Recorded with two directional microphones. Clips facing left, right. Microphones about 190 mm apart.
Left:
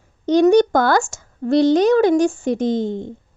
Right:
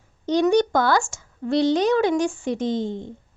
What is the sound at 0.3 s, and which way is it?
Speech, 50° left (ahead or behind).